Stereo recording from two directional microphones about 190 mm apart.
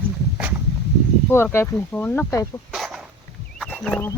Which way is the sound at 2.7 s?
Centre (ahead or behind).